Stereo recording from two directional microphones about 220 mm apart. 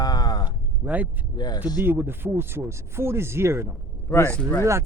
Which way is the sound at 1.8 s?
10° right (ahead or behind).